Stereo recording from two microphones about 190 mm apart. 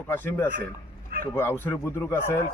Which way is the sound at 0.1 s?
10° left (ahead or behind).